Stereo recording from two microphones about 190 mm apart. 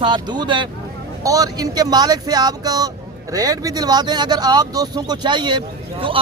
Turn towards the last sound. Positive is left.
turn(degrees=-25)  # may be behind; listen again after turning